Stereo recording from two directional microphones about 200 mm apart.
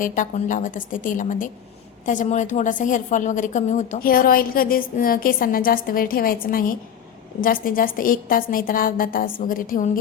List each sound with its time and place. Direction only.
0.0 s a woman's voice: 40° left (ahead or behind)